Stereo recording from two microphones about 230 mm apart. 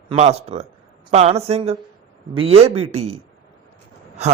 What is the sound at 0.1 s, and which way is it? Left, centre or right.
Speech, right.